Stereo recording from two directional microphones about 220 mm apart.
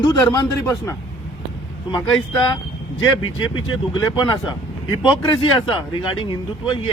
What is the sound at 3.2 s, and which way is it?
Speech, 20° left (ahead or behind).